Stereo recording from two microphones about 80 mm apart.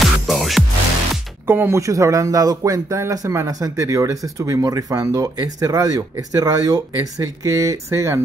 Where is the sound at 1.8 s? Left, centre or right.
Right.